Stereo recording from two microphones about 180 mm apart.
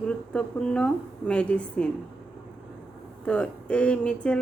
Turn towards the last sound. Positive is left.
turn(degrees=5)  # may be behind; listen again after turning